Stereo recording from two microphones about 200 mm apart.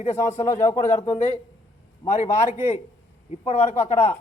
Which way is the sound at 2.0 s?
35° left (ahead or behind).